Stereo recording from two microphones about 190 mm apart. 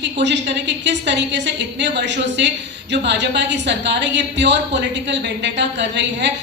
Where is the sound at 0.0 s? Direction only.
65° right (ahead or behind).